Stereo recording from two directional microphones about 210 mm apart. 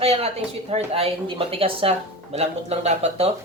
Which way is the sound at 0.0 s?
30° right (ahead or behind).